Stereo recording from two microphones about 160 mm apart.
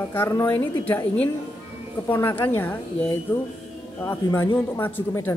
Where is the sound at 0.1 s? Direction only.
15° left (ahead or behind).